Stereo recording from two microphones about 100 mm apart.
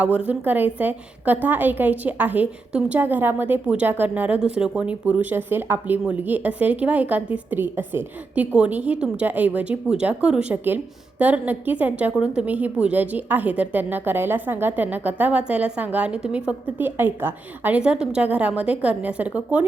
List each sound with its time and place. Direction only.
0.0 s a woman's voice: 15° right (ahead or behind)